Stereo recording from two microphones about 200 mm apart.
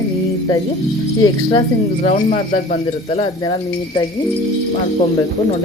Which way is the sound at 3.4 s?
20° left (ahead or behind).